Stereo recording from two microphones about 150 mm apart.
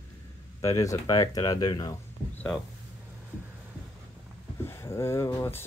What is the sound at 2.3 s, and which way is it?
Speech, 5° left (ahead or behind).